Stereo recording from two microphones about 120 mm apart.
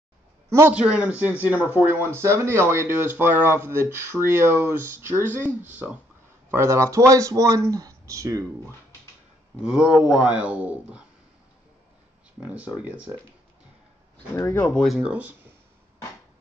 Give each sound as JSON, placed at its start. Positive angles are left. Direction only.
{"t": 0.5, "sound": "a man's voice", "side_deg": -25}
{"t": 0.7, "sound": "speech", "side_deg": -10}
{"t": 9.6, "sound": "speech", "side_deg": -5}
{"t": 12.4, "sound": "speech", "side_deg": -10}
{"t": 14.3, "sound": "speech", "side_deg": 20}
{"t": 14.7, "sound": "speech", "side_deg": 5}
{"t": 15.0, "sound": "speech", "side_deg": -10}